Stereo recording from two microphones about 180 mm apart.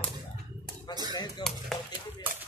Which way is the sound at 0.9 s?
25° left (ahead or behind).